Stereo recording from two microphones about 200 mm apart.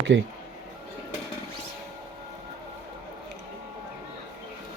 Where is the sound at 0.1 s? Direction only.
65° right (ahead or behind).